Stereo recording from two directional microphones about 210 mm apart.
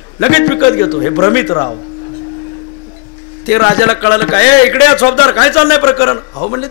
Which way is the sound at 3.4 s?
20° left (ahead or behind).